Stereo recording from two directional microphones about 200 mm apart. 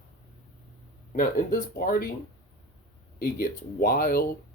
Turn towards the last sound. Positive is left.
turn(degrees=45)  # may be behind; listen again after turning